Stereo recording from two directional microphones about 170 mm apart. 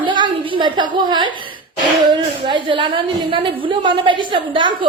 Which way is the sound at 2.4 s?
30° right (ahead or behind).